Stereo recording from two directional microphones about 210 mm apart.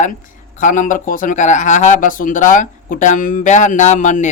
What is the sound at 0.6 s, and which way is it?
Speech, 40° left (ahead or behind).